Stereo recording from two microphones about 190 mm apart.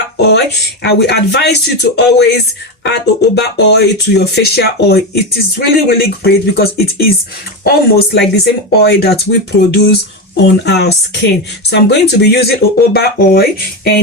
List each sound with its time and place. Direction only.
0.2 s speech: 60° left (ahead or behind)